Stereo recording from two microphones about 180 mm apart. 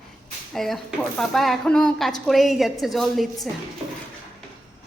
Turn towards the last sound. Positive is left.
turn(degrees=0)  # may be behind; listen again after turning